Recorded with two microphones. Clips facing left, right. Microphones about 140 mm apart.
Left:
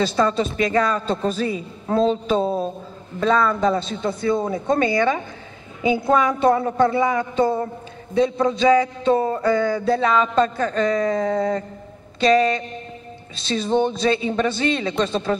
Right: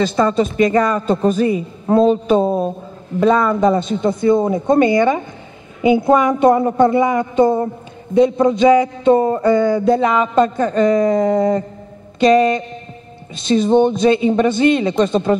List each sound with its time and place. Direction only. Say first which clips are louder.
0.0 s speech: right 4 dB; 15° right (ahead or behind)